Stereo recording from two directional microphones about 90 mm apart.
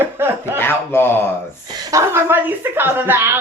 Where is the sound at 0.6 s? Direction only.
25° left (ahead or behind).